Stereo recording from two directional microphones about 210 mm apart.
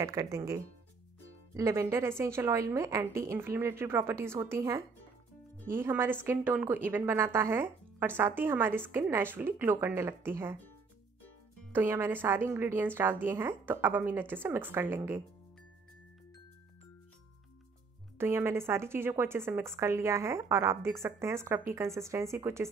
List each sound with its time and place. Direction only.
0.0 s a woman's voice: 15° right (ahead or behind)
11.7 s a woman's voice: 10° right (ahead or behind)
18.1 s a woman's voice: 10° right (ahead or behind)